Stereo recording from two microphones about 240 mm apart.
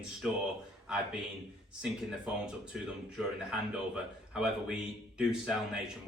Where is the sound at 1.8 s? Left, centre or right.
Centre.